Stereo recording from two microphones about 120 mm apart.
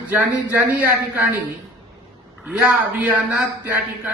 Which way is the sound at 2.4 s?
10° right (ahead or behind).